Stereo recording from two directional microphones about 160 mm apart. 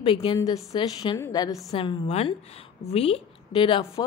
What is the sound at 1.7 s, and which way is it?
A woman's voice, 35° left (ahead or behind).